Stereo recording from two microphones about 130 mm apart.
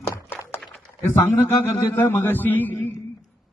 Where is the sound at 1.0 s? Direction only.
15° left (ahead or behind).